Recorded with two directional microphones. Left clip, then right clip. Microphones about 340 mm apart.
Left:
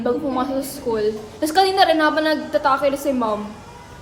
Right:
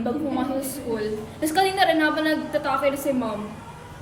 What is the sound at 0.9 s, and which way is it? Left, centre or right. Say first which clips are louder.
A woman's voice: left 7 dB; centre.